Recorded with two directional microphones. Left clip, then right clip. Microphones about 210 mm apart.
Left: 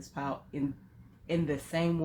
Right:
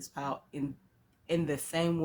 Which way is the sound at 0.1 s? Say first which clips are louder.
Left 1 dB; 30° right (ahead or behind).